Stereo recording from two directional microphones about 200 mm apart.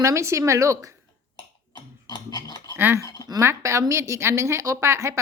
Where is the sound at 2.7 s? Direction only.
10° right (ahead or behind).